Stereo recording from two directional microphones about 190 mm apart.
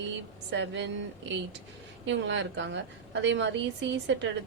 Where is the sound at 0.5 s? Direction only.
70° right (ahead or behind).